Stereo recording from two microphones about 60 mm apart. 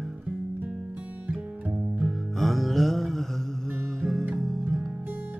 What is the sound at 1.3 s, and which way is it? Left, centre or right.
Music, centre.